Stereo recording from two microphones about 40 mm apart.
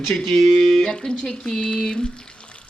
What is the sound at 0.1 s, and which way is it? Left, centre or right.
Speech, centre.